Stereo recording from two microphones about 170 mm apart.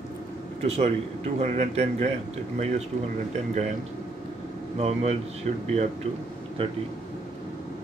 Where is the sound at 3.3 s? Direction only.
45° right (ahead or behind).